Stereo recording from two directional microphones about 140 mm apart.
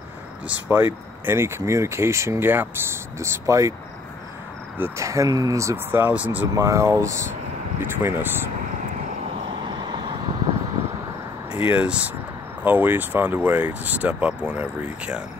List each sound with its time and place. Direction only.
0.5 s speech: 15° right (ahead or behind)
4.7 s speech: 20° right (ahead or behind)
9.7 s vehicle: 35° right (ahead or behind)
11.6 s speech: 10° right (ahead or behind)